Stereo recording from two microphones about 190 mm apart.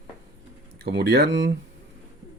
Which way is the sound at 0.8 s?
60° right (ahead or behind).